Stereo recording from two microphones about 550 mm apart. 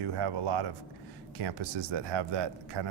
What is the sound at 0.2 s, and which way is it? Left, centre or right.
Speech, right.